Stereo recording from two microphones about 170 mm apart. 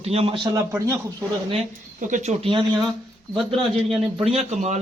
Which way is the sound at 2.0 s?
45° right (ahead or behind).